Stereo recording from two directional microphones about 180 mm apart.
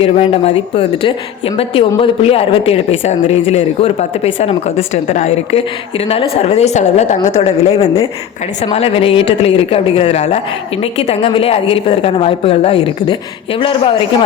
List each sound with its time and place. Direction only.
0.0 s a man's voice: 35° left (ahead or behind)